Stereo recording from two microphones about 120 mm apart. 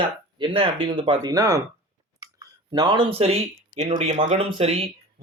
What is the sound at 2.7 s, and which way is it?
Speech, 40° right (ahead or behind).